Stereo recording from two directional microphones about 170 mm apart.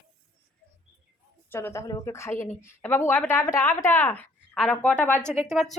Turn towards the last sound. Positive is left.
turn(degrees=0)  # may be behind; listen again after turning